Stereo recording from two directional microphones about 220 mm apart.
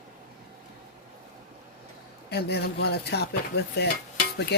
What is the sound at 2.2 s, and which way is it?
Speech, 45° left (ahead or behind).